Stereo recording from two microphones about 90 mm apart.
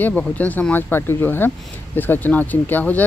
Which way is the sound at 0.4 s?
15° left (ahead or behind).